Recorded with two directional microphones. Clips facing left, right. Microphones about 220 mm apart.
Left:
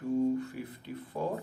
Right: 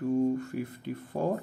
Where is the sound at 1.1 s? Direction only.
45° right (ahead or behind).